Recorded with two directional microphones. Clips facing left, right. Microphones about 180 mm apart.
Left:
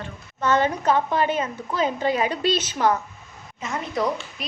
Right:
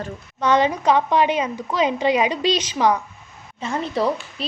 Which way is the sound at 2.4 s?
50° left (ahead or behind).